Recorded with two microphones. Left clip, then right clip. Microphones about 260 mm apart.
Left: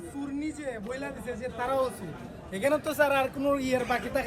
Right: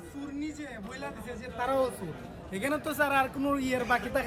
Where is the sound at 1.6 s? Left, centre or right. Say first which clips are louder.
Even; right.